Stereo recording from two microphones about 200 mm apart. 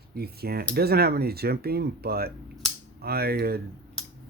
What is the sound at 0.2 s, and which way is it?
Speech, 50° right (ahead or behind).